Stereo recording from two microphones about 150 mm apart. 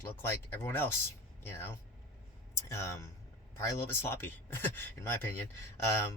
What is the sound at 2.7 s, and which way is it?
Speech, 20° left (ahead or behind).